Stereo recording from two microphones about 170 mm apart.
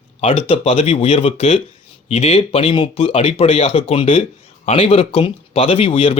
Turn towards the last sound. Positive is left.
turn(degrees=35)  # may be behind; listen again after turning